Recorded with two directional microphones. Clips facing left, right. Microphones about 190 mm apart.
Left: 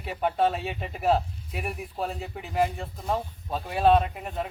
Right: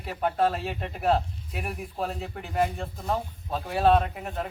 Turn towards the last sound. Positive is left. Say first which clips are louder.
# even
turn(degrees=0)  # may be behind; listen again after turning